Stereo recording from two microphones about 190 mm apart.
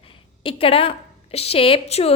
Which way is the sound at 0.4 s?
30° left (ahead or behind).